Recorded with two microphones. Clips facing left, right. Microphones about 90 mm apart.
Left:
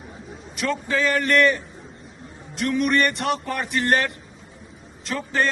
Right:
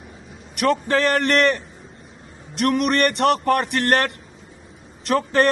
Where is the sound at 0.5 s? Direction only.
70° right (ahead or behind).